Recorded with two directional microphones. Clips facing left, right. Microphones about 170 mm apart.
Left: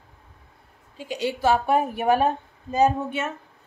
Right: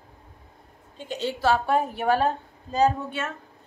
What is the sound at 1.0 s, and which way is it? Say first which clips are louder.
A woman's voice: left 2 dB; 10° left (ahead or behind).